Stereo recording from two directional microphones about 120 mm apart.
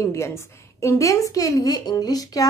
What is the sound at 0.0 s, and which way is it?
A woman's voice, 25° left (ahead or behind).